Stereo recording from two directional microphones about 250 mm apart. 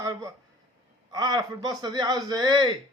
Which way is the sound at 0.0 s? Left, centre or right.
Centre.